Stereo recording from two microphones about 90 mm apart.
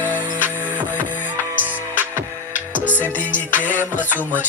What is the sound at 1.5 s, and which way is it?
Music, 20° right (ahead or behind).